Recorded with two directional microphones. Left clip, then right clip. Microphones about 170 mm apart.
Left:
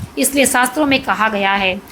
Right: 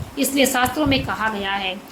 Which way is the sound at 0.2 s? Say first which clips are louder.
Left 4 dB; 35° left (ahead or behind).